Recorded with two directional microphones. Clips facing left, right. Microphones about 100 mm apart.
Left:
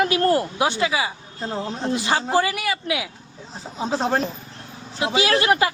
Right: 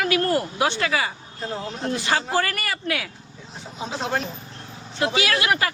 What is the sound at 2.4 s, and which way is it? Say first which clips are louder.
Speech: left 3 dB; 5° left (ahead or behind).